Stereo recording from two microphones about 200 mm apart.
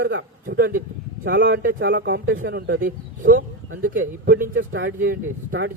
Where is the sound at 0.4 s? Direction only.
45° right (ahead or behind).